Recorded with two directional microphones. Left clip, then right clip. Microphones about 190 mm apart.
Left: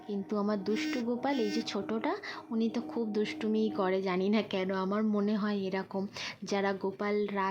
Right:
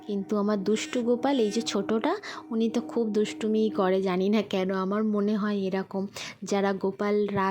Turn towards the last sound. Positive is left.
turn(degrees=-30)  # may be behind; listen again after turning